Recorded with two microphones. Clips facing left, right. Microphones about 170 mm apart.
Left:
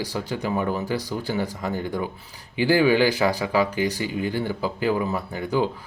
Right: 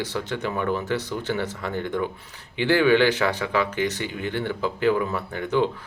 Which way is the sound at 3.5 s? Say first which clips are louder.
Left 1 dB; 35° left (ahead or behind).